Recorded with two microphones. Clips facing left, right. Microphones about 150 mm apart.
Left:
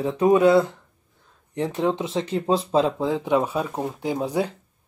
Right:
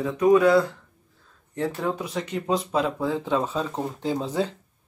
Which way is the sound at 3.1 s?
15° left (ahead or behind).